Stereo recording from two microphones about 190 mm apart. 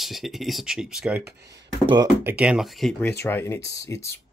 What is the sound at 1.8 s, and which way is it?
Speech, 25° right (ahead or behind).